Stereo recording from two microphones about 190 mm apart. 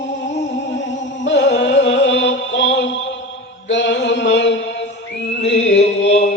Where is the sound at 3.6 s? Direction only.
70° left (ahead or behind).